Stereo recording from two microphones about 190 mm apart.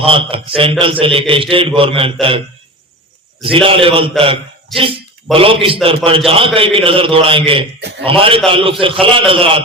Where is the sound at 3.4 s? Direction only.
30° right (ahead or behind).